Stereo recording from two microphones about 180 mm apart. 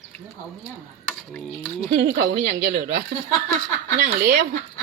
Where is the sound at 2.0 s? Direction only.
55° right (ahead or behind).